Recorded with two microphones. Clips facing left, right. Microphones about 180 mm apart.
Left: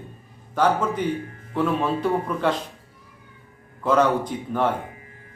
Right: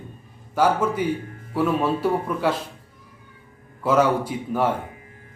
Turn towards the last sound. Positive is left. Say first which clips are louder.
# right 1 dB
turn(degrees=-10)  # may be behind; listen again after turning